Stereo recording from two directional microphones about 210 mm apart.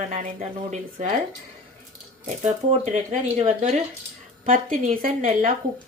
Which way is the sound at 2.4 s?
35° right (ahead or behind).